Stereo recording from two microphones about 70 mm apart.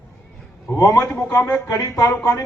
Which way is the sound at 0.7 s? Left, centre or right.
Left.